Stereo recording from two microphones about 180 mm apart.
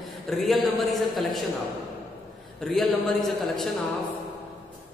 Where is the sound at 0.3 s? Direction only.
Centre (ahead or behind).